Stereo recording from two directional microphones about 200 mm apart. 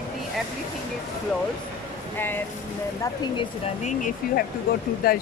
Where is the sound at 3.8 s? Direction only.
40° left (ahead or behind).